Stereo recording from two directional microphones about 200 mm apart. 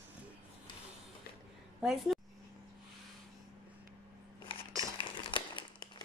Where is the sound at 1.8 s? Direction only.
Centre (ahead or behind).